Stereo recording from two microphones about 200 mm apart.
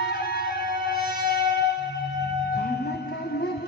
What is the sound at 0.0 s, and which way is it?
Music, 50° left (ahead or behind).